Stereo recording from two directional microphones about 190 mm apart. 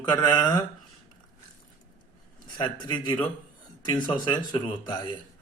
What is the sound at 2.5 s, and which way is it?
A man's voice, 25° left (ahead or behind).